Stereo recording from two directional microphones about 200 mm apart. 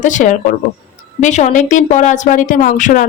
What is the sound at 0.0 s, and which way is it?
Speech, 40° left (ahead or behind).